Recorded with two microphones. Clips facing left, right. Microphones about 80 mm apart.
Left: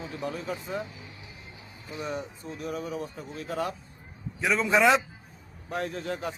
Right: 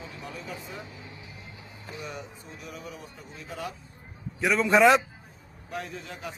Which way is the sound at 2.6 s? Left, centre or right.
Left.